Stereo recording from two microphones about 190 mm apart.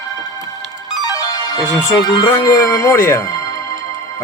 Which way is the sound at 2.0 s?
25° left (ahead or behind).